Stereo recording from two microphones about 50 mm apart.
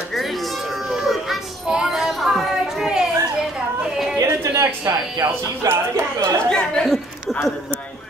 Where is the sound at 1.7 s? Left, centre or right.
Centre.